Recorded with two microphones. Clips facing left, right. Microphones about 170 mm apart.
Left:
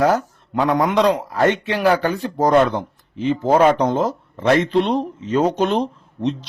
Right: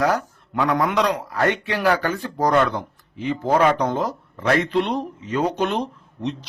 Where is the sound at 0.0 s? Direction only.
25° left (ahead or behind).